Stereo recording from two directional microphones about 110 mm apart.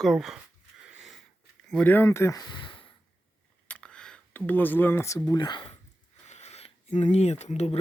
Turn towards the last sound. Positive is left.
turn(degrees=90)